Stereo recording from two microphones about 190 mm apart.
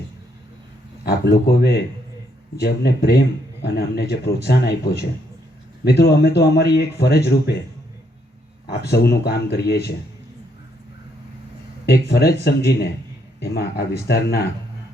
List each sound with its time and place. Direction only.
1.0 s speech: 55° left (ahead or behind)
8.6 s speech: 55° left (ahead or behind)
12.0 s speech: 60° left (ahead or behind)